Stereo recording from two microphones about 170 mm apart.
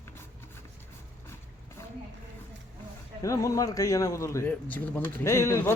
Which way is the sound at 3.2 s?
20° left (ahead or behind).